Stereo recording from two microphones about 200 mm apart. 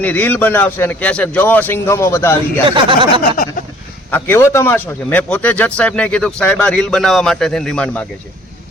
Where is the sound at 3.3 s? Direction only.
45° left (ahead or behind).